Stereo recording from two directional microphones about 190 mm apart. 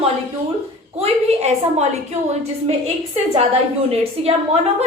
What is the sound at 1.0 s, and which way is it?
Speech, 35° right (ahead or behind).